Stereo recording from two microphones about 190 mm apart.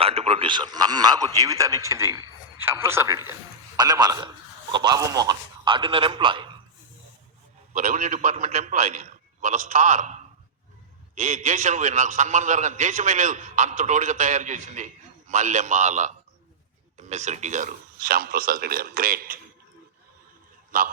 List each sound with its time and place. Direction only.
0.0 s a man's voice: 30° right (ahead or behind)
7.7 s a man's voice: 40° right (ahead or behind)
20.7 s a man's voice: 45° right (ahead or behind)